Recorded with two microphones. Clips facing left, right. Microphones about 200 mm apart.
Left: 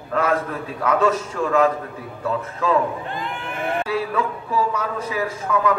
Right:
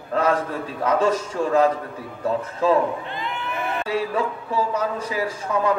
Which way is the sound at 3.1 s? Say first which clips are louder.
Even; 50° left (ahead or behind).